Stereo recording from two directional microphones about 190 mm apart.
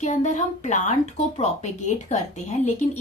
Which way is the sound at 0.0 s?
40° left (ahead or behind).